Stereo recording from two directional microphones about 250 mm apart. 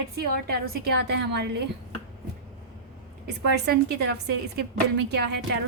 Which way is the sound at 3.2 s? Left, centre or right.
Right.